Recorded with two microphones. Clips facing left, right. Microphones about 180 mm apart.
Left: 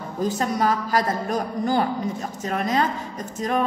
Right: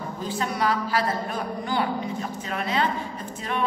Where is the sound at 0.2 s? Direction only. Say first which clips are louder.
Left 5 dB; 45° left (ahead or behind).